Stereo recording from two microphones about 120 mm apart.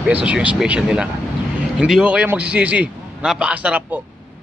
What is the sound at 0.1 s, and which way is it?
A man's voice, 10° right (ahead or behind).